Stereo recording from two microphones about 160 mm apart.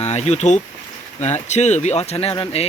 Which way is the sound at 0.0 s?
45° left (ahead or behind).